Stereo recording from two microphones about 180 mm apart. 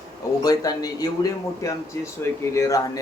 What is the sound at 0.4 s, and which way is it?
A man's voice, 20° left (ahead or behind).